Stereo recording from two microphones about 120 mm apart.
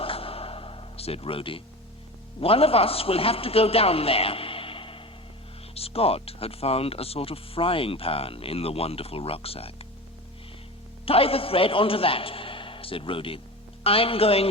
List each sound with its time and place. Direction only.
0.0 s a sound: 50° left (ahead or behind)
2.4 s a man's voice: 55° left (ahead or behind)
11.0 s speech: 50° left (ahead or behind)